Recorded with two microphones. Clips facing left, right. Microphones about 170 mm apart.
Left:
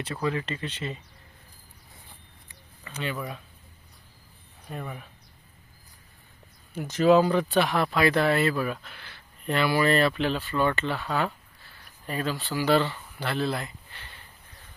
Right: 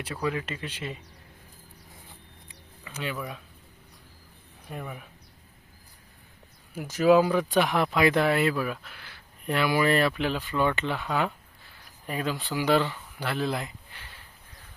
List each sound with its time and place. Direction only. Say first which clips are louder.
0.0 s speech: left 1 dB; 10° right (ahead or behind)
2.8 s speech: left 1 dB; 5° right (ahead or behind)
4.7 s speech: left 1 dB; 10° right (ahead or behind)
6.7 s speech: even; 10° right (ahead or behind)